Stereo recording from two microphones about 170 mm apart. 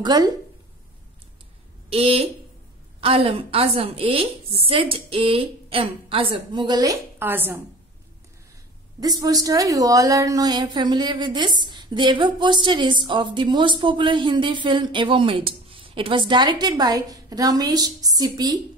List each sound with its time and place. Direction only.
0.0 s a woman's voice: 25° right (ahead or behind)
1.9 s a woman's voice: 35° right (ahead or behind); by 7.6 s 10° right (ahead or behind)
9.2 s a woman's voice: 20° right (ahead or behind)